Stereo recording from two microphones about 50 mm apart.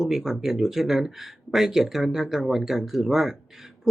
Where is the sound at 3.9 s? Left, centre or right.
Centre.